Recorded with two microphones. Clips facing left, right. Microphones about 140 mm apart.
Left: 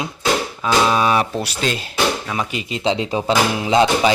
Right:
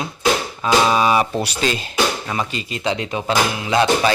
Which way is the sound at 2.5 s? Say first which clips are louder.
Left 2 dB; 20° left (ahead or behind).